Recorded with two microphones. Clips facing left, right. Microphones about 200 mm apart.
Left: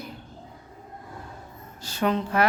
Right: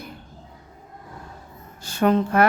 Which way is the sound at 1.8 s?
50° right (ahead or behind).